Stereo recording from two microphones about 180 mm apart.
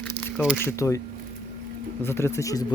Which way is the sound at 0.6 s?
15° left (ahead or behind).